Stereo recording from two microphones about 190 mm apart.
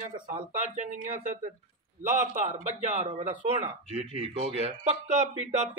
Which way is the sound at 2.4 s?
40° right (ahead or behind).